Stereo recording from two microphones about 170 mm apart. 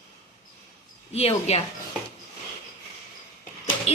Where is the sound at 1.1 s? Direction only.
40° left (ahead or behind).